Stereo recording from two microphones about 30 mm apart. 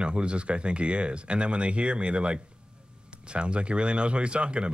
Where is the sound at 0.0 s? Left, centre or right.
Right.